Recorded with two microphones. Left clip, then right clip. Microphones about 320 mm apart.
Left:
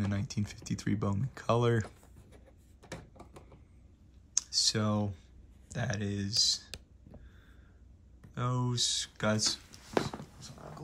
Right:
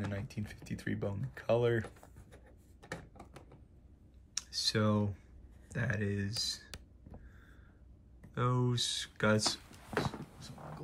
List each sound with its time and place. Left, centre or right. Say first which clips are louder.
0.1 s speech: left 4 dB; centre
2.9 s a sound: right 1 dB; centre
4.3 s computer keyboard: left 5 dB; centre
5.7 s speech: even; centre
8.4 s speech: even; centre